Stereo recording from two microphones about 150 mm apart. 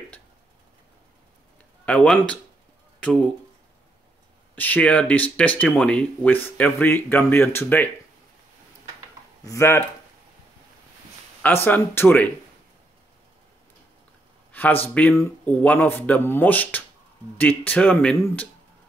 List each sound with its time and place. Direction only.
1.9 s speech: 5° left (ahead or behind)
4.6 s speech: 10° left (ahead or behind)
9.4 s speech: 20° left (ahead or behind)
11.4 s speech: 15° left (ahead or behind)
14.5 s a sound: 10° left (ahead or behind)
15.0 s speech: 10° left (ahead or behind)